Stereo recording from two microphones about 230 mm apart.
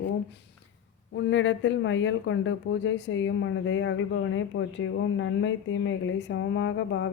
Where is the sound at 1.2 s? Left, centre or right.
Left.